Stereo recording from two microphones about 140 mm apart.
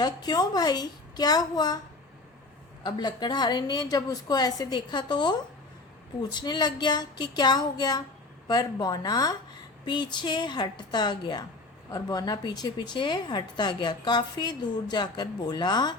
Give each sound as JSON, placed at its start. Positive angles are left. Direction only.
{"t": 0.0, "sound": "a woman's voice", "side_deg": 30}
{"t": 2.8, "sound": "a woman's voice", "side_deg": 30}